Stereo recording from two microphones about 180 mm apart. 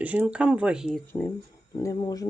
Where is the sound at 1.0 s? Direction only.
10° left (ahead or behind).